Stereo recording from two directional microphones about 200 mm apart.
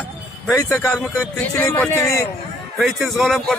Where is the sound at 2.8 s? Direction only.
Centre (ahead or behind).